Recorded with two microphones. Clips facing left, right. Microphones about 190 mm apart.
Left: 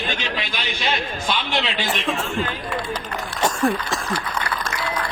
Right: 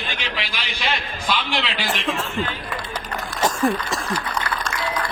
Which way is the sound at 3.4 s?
Centre (ahead or behind).